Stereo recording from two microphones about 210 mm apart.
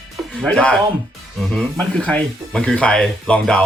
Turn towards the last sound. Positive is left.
turn(degrees=5)  # may be behind; listen again after turning